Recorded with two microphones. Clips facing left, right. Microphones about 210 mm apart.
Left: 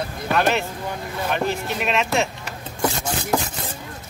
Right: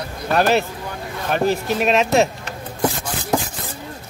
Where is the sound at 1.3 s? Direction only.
40° right (ahead or behind).